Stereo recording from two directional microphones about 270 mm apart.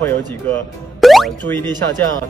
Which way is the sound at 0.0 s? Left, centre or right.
Centre.